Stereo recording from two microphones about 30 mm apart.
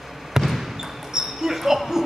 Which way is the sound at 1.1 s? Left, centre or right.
Centre.